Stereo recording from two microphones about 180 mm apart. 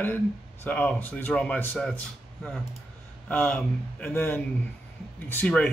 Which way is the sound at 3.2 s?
10° left (ahead or behind).